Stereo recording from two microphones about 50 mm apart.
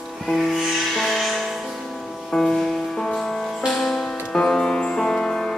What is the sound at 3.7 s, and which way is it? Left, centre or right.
Music, centre.